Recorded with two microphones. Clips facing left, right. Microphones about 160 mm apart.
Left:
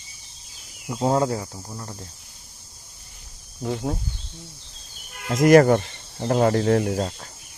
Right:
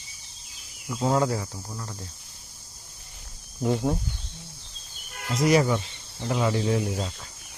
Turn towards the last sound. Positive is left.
turn(degrees=50)  # may be behind; listen again after turning